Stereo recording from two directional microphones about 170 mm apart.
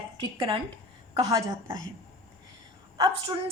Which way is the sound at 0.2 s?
30° right (ahead or behind).